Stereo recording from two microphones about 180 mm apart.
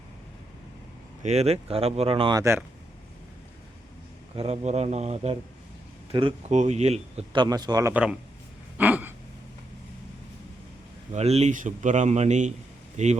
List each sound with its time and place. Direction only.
1.2 s speech: 35° right (ahead or behind)
2.4 s speech: 15° right (ahead or behind)
4.4 s speech: 35° right (ahead or behind)
6.5 s speech: 40° right (ahead or behind)
7.4 s speech: 20° right (ahead or behind)
8.8 s a sound: 10° right (ahead or behind)
11.1 s speech: 35° right (ahead or behind)